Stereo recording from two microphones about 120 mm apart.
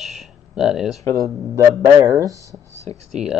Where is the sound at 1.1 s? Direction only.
25° right (ahead or behind).